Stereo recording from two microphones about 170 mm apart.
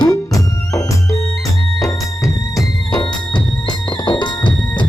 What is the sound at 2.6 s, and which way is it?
Music, 25° left (ahead or behind).